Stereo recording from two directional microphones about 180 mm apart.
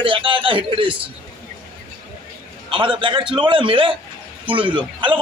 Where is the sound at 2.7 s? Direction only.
25° right (ahead or behind).